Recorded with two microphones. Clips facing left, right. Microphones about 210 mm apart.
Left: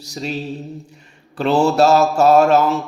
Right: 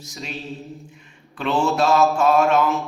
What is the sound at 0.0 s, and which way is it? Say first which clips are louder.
Speech: left 8 dB; 35° left (ahead or behind).